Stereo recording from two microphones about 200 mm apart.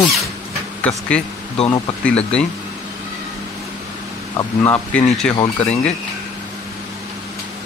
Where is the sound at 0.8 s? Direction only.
5° left (ahead or behind).